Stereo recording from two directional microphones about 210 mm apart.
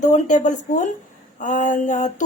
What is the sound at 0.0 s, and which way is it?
Speech, 35° left (ahead or behind).